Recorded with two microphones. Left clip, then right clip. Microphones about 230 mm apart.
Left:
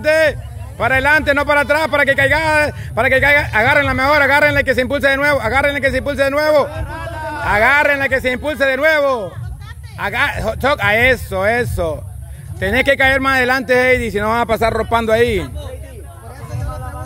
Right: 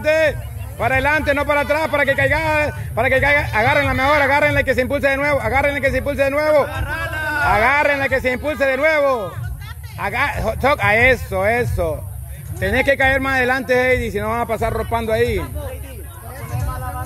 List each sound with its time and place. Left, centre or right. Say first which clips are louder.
0.0 s speech: left 3 dB; centre
6.7 s a sound: right 3 dB; right
7.4 s speech: left 3 dB; centre